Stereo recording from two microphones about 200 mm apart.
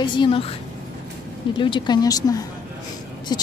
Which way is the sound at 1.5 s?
25° left (ahead or behind).